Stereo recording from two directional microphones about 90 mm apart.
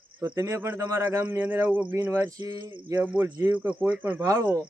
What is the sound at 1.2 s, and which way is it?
Speech, 20° right (ahead or behind).